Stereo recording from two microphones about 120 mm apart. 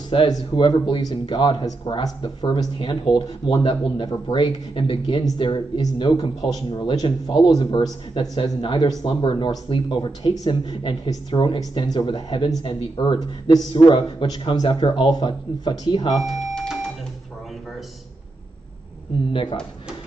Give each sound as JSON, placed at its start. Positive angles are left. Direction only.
{"t": 0.1, "sound": "speech", "side_deg": 40}
{"t": 16.2, "sound": "cash register", "side_deg": 0}